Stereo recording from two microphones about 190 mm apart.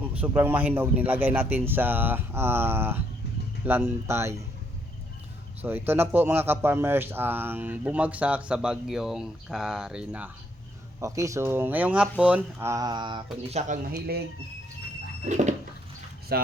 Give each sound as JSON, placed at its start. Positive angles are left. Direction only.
{"t": 0.1, "sound": "a man's voice", "side_deg": -10}
{"t": 5.6, "sound": "a man's voice", "side_deg": -10}
{"t": 13.5, "sound": "speech", "side_deg": -35}
{"t": 15.3, "sound": "speech", "side_deg": -40}
{"t": 16.3, "sound": "speech", "side_deg": -55}